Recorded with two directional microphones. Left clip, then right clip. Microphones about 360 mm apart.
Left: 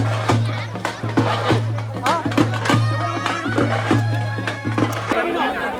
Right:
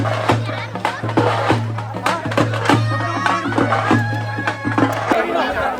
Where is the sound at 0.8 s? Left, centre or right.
Right.